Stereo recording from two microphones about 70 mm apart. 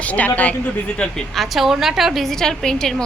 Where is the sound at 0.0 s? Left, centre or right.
Left.